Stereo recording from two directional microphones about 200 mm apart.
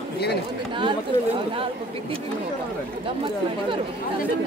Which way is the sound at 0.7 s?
25° right (ahead or behind).